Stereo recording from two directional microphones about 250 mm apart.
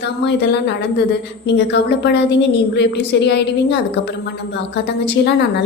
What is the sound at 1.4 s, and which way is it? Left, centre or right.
A woman's voice, left.